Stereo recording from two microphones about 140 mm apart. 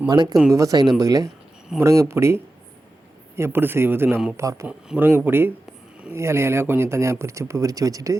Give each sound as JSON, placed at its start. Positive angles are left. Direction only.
{"t": 0.1, "sound": "speech", "side_deg": -30}